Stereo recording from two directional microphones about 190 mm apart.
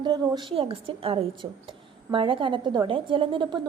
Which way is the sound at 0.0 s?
25° right (ahead or behind).